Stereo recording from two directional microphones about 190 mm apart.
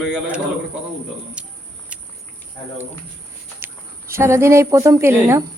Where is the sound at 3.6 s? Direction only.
15° right (ahead or behind).